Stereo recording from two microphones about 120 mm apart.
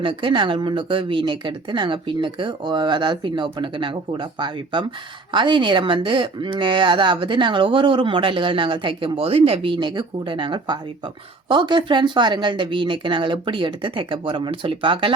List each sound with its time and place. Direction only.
0.0 s speech: 45° right (ahead or behind)